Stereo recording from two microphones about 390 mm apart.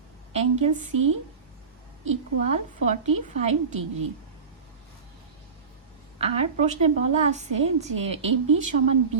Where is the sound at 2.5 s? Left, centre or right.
Centre.